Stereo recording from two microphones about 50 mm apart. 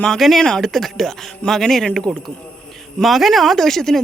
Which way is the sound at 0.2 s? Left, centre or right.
Centre.